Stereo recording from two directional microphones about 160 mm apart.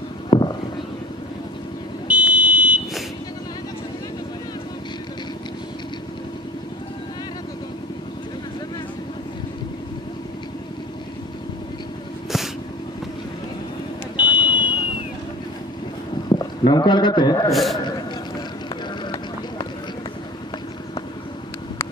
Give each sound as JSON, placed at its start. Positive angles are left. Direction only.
{"t": 0.3, "sound": "a sound", "side_deg": 35}
{"t": 2.0, "sound": "buzzer", "side_deg": -10}
{"t": 14.1, "sound": "vehicle", "side_deg": -10}
{"t": 16.3, "sound": "a man's voice", "side_deg": 25}
{"t": 17.5, "sound": "a man's voice", "side_deg": 0}